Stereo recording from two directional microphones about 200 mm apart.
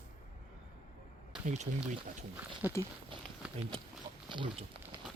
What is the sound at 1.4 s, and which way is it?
Speech, 35° right (ahead or behind).